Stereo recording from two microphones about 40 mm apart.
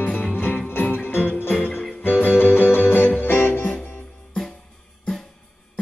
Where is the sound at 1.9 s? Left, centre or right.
Left.